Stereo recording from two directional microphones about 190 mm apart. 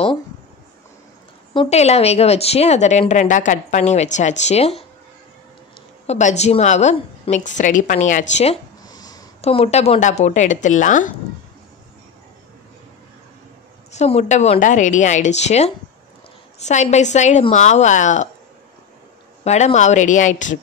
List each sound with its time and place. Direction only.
1.5 s a woman's voice: 30° left (ahead or behind)
6.0 s a woman's voice: 35° left (ahead or behind)
8.8 s a sound: 20° left (ahead or behind)
9.4 s a woman's voice: 30° left (ahead or behind)
13.9 s a woman's voice: 35° left (ahead or behind)
19.4 s a woman's voice: 35° left (ahead or behind)